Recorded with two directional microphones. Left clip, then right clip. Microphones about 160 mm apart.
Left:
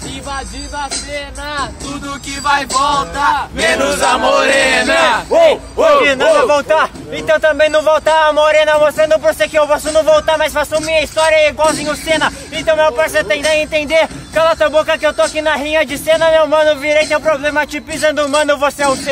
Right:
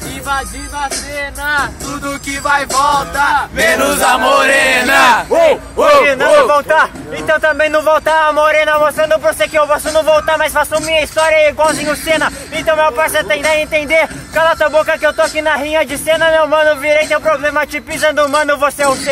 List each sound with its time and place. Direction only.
1.4 s speech: 30° left (ahead or behind)
3.8 s battle cry: 90° right
6.0 s speech: 5° right (ahead or behind)
7.2 s speech: 5° left (ahead or behind)